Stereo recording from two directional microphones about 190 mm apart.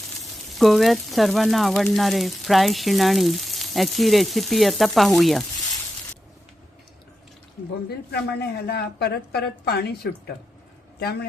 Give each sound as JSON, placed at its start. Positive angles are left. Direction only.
{"t": 0.6, "sound": "speech", "side_deg": 0}
{"t": 7.9, "sound": "a woman's voice", "side_deg": 55}